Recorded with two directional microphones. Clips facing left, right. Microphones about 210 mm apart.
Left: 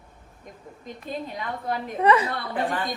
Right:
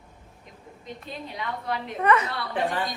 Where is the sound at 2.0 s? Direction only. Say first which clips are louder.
Left 3 dB; 30° left (ahead or behind).